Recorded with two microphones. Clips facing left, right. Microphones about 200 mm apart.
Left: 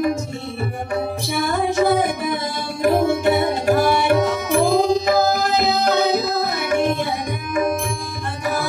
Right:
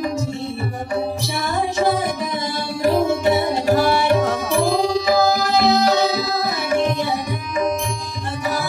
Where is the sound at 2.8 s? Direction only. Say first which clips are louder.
Even; 55° left (ahead or behind).